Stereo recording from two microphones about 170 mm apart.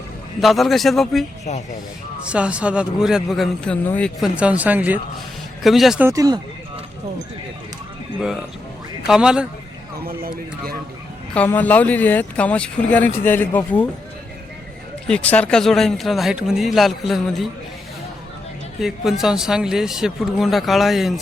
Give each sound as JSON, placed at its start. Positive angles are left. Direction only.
{"t": 0.3, "sound": "speech", "side_deg": 0}
{"t": 2.3, "sound": "speech", "side_deg": -5}
{"t": 4.2, "sound": "speech", "side_deg": -5}
{"t": 6.1, "sound": "speech", "side_deg": -20}
{"t": 9.0, "sound": "speech", "side_deg": -5}
{"t": 11.3, "sound": "speech", "side_deg": 10}
{"t": 15.0, "sound": "speech", "side_deg": 5}
{"t": 18.8, "sound": "speech", "side_deg": 0}